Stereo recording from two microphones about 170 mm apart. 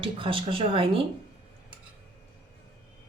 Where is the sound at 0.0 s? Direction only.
30° right (ahead or behind).